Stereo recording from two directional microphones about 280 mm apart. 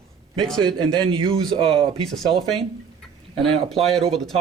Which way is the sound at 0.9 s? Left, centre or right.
Centre.